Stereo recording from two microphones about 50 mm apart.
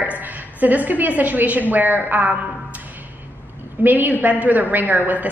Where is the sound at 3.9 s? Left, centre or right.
Right.